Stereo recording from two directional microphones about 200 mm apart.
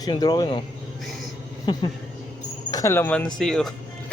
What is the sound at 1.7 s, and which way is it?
Speech, 20° left (ahead or behind).